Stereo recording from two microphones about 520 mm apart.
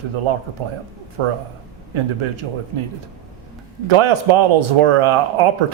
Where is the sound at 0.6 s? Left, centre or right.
Right.